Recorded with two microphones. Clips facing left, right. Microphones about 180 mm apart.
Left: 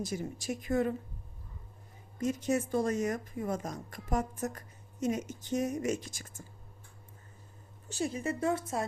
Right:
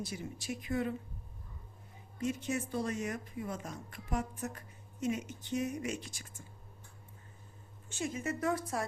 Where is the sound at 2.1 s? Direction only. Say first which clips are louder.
Left 5 dB; 40° left (ahead or behind).